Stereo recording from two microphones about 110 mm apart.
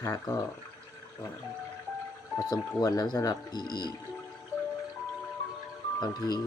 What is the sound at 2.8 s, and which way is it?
Speech, 35° left (ahead or behind).